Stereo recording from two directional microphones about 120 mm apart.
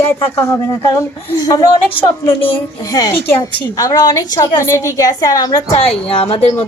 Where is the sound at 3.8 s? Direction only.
30° left (ahead or behind).